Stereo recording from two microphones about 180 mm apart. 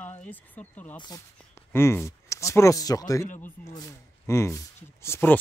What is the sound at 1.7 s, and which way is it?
Speech, 15° left (ahead or behind).